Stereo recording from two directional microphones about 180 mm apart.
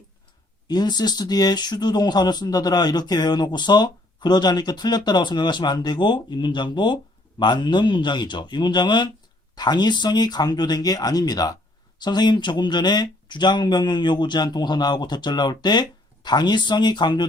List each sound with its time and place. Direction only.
0.7 s speech: 25° left (ahead or behind)